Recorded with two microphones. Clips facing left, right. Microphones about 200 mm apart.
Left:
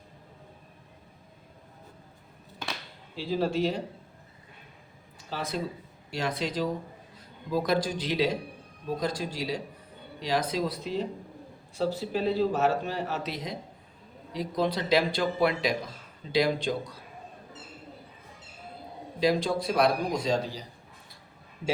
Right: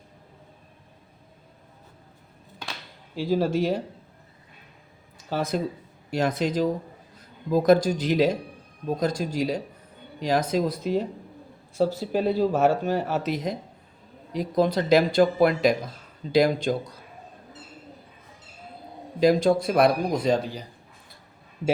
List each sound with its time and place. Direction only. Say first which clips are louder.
3.2 s speech: right 4 dB; 45° right (ahead or behind)
5.3 s speech: right 6 dB; 45° right (ahead or behind)
12.1 s speech: right 3 dB; 50° right (ahead or behind)
19.2 s speech: right 6 dB; 50° right (ahead or behind)